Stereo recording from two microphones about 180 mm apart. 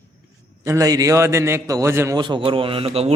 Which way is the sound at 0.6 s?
20° right (ahead or behind).